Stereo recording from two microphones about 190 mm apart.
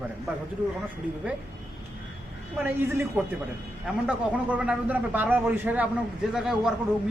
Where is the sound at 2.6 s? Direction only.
10° right (ahead or behind).